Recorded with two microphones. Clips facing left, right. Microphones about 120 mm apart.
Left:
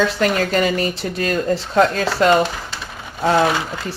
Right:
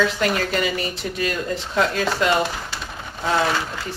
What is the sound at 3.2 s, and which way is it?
Speech, 50° left (ahead or behind).